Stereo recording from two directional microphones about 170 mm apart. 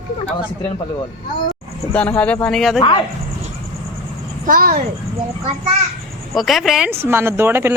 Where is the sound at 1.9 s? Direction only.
5° left (ahead or behind).